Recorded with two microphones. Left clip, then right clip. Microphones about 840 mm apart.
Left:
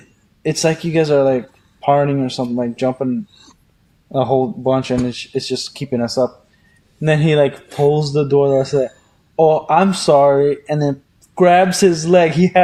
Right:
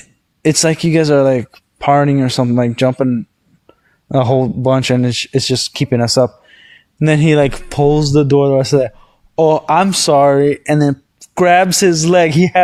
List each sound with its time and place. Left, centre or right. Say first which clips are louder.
0.4 s speech: right 4 dB; right
4.1 s speech: right 2 dB; right